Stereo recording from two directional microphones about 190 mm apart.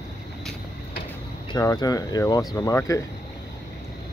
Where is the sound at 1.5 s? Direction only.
20° left (ahead or behind).